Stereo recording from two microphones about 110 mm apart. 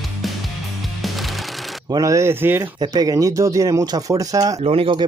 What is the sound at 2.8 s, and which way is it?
Speech, 35° right (ahead or behind).